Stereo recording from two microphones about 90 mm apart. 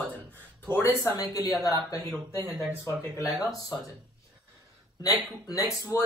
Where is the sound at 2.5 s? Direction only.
20° right (ahead or behind).